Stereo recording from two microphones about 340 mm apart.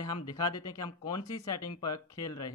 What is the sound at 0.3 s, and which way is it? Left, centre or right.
Speech, centre.